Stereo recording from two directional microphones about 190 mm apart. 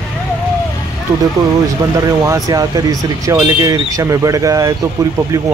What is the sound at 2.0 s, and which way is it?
A man's voice, 20° right (ahead or behind).